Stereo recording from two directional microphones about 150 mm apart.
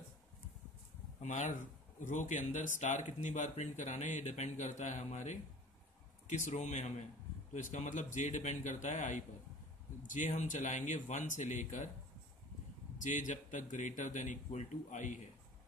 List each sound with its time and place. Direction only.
1.2 s speech: 55° left (ahead or behind)
13.0 s a man's voice: 55° left (ahead or behind)